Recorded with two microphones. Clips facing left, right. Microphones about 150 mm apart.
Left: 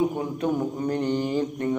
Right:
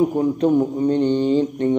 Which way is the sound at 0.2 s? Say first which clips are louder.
Right 8 dB; 30° right (ahead or behind).